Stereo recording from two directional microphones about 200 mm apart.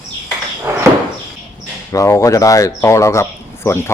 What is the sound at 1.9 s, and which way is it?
Speech, 15° left (ahead or behind).